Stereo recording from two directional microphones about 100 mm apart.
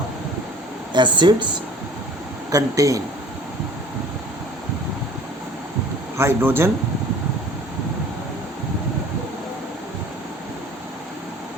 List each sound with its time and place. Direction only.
0.9 s speech: 50° right (ahead or behind)
2.5 s speech: 35° right (ahead or behind)
6.1 s speech: 25° right (ahead or behind)